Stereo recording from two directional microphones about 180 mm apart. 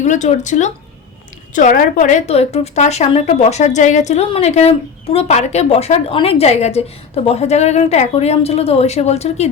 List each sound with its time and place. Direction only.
0.0 s a woman's voice: 40° left (ahead or behind)